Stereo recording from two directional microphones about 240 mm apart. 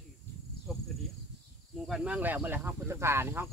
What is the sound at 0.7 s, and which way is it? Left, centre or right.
Insect, centre.